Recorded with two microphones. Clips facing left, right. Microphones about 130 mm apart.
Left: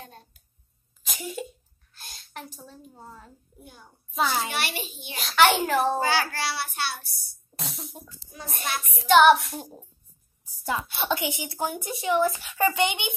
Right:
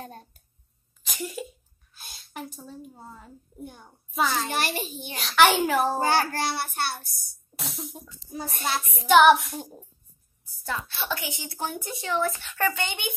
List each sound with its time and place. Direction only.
0.0 s a sound: 45° right (ahead or behind)
1.0 s a sound: centre (ahead or behind)
4.1 s a child's voice: 5° left (ahead or behind)
4.5 s a child's voice: 45° right (ahead or behind)
5.1 s a child's voice: centre (ahead or behind)
5.9 s a child's voice: 50° right (ahead or behind)
7.5 s music: centre (ahead or behind)
8.6 s child singing: 30° right (ahead or behind)
9.0 s a child's voice: centre (ahead or behind)
10.4 s a woman's voice: 20° left (ahead or behind)